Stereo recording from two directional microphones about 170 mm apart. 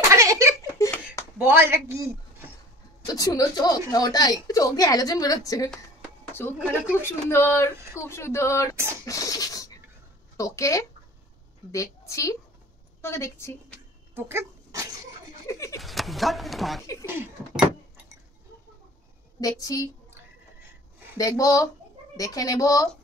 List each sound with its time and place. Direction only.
0.1 s a sound: 15° right (ahead or behind)
0.6 s a sound: 20° left (ahead or behind)
1.4 s a man's voice: 15° right (ahead or behind)
3.1 s a woman's voice: 20° left (ahead or behind)
7.7 s speech: 15° right (ahead or behind)
8.0 s a woman's voice: 15° left (ahead or behind)
9.0 s scratch: 20° left (ahead or behind)
10.3 s a woman's voice: 20° left (ahead or behind)
14.1 s dog: 15° right (ahead or behind)
15.4 s a sound: 20° left (ahead or behind)
15.8 s speech: centre (ahead or behind)
17.0 s speech: 15° right (ahead or behind)
19.4 s a woman's voice: 20° left (ahead or behind)
21.2 s a woman's voice: 20° left (ahead or behind)